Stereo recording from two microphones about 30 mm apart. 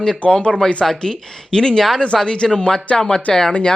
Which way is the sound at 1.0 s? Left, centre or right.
Left.